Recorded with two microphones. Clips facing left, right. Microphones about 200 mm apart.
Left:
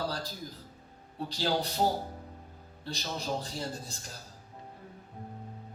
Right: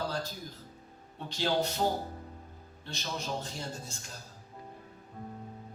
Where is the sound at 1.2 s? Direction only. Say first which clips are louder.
Even; 35° left (ahead or behind).